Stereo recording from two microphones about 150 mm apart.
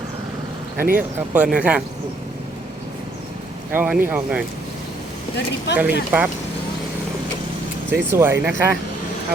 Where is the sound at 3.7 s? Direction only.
10° right (ahead or behind).